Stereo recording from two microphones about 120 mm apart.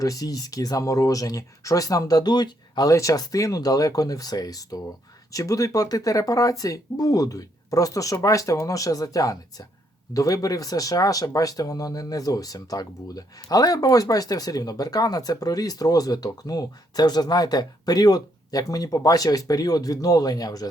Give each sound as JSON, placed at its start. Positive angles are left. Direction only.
{"t": 0.0, "sound": "speech", "side_deg": 30}